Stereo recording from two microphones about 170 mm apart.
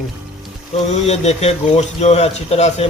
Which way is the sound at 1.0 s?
40° left (ahead or behind).